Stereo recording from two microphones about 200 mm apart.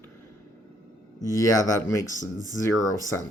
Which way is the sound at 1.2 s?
15° left (ahead or behind).